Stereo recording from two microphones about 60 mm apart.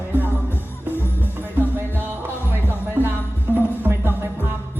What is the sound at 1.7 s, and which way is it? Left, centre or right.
Music, right.